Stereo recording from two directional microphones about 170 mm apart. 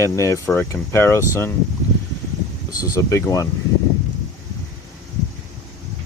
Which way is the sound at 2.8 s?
20° left (ahead or behind).